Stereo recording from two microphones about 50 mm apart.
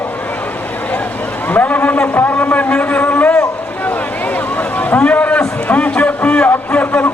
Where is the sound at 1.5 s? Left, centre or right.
Left.